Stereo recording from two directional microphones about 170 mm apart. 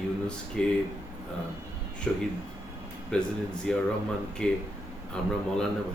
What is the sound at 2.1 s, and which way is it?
Speech, 5° left (ahead or behind).